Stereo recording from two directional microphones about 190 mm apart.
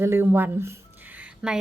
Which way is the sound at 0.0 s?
10° right (ahead or behind).